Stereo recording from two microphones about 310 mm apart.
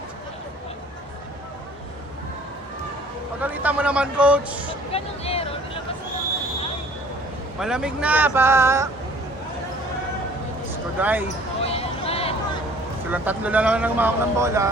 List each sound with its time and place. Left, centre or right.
3.4 s speech: centre
4.9 s vehicle: centre
7.6 s speech: centre
11.0 s speech: centre
11.6 s basketball bounce: centre
13.1 s speech: centre